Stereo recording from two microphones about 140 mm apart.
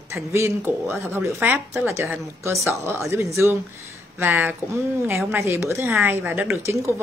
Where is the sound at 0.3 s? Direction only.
15° right (ahead or behind).